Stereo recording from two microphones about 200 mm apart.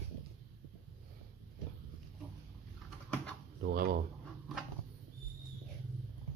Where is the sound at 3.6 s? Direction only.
50° right (ahead or behind).